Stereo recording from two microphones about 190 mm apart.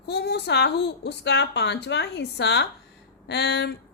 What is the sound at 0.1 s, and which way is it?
A woman's voice, 60° left (ahead or behind).